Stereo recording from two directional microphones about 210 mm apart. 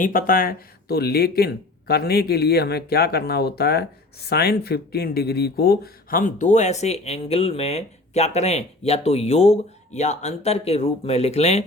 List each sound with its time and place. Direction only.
0.0 s speech: 40° left (ahead or behind)